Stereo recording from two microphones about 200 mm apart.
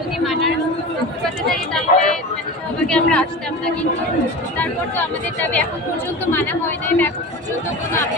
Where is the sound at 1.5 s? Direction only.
5° left (ahead or behind).